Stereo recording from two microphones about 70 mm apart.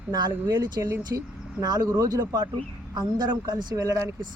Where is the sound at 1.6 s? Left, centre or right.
Right.